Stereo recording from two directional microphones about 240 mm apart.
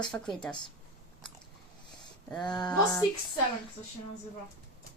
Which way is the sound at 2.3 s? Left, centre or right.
Centre.